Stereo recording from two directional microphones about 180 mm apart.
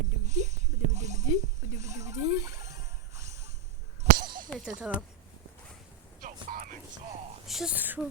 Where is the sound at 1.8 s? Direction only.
40° right (ahead or behind).